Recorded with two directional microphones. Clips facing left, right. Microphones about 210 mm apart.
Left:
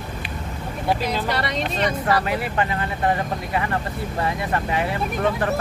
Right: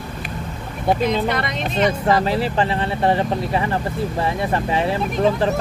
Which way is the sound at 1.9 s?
30° right (ahead or behind).